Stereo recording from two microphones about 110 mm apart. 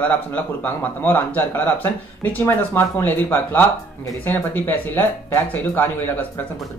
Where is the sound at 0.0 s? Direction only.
15° left (ahead or behind).